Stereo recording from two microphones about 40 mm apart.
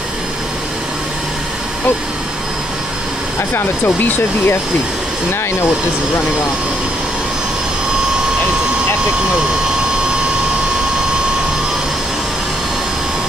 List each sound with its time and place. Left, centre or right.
3.5 s speech: left